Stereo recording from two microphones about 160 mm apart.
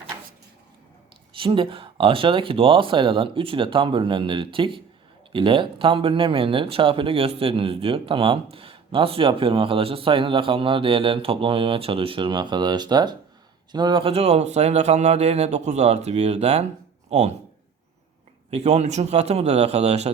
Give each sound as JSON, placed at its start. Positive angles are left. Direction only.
{"t": 1.3, "sound": "a man's voice", "side_deg": -35}
{"t": 18.5, "sound": "a man's voice", "side_deg": -40}